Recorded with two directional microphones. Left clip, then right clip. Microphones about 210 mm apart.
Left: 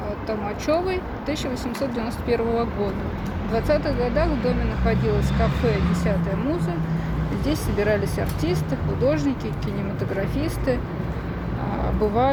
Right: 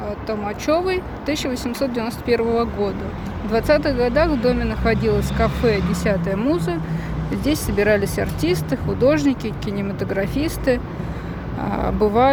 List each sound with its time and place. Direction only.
0.3 s speech: 20° right (ahead or behind)
1.5 s speech: 35° right (ahead or behind)
7.8 s speech: 30° right (ahead or behind)
11.8 s speech: 30° right (ahead or behind)